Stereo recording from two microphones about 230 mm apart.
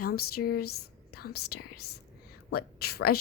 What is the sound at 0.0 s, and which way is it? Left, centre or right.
A woman's voice, left.